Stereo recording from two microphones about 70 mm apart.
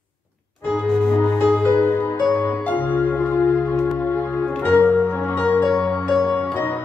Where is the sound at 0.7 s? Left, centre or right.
Centre.